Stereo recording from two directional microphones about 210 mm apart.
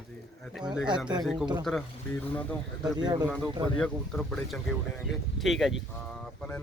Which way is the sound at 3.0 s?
20° right (ahead or behind).